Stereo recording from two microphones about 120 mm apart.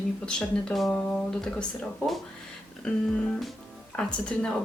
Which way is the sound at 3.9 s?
5° left (ahead or behind).